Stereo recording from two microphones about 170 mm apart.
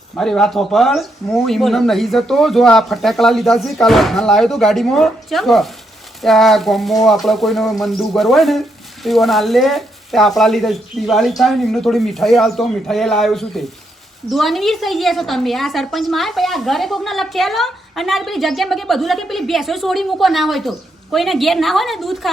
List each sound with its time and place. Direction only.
0.2 s a woman's voice: centre (ahead or behind)